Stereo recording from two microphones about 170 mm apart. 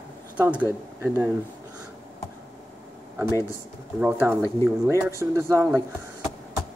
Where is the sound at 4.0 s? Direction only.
10° right (ahead or behind).